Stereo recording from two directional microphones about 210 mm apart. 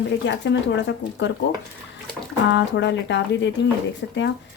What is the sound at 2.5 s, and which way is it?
A woman's voice, 60° left (ahead or behind).